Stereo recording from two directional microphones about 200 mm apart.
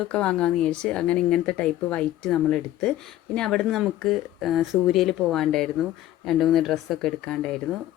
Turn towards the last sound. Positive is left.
turn(degrees=5)  # may be behind; listen again after turning